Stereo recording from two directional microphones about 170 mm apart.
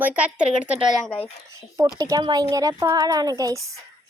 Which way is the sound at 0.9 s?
5° left (ahead or behind).